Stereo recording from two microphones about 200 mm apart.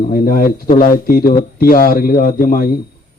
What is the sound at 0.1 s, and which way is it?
A man's voice, 45° left (ahead or behind).